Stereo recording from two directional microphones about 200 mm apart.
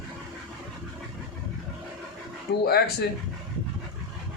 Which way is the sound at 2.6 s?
55° left (ahead or behind).